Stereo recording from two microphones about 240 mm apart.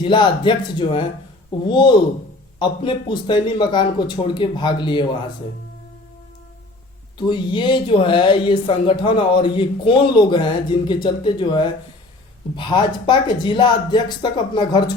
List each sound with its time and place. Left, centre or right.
0.0 s speech: centre
7.2 s speech: centre